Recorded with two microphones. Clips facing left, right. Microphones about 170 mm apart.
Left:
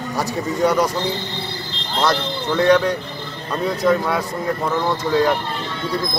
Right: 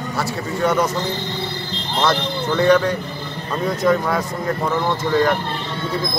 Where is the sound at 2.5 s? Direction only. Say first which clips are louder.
Even; centre (ahead or behind).